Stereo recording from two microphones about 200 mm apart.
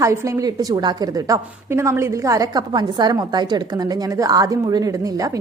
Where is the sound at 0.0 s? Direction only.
15° right (ahead or behind).